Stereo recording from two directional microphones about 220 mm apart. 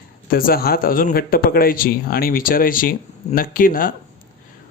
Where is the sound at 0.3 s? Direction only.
40° left (ahead or behind).